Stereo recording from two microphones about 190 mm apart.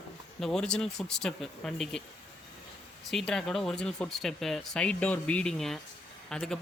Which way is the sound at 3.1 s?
Centre (ahead or behind).